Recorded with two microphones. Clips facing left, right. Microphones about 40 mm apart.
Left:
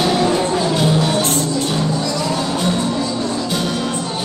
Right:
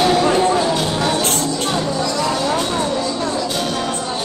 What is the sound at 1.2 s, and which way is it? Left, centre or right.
Music, right.